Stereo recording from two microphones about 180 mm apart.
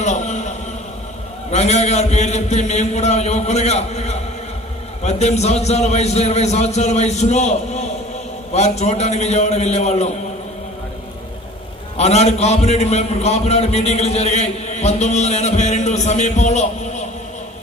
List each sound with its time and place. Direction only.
0.0 s a sound: 40° left (ahead or behind)
1.5 s a man's voice: 35° left (ahead or behind)
11.9 s a man's voice: 35° left (ahead or behind)